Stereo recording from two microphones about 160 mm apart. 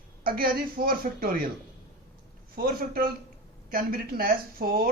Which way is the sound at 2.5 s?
65° right (ahead or behind).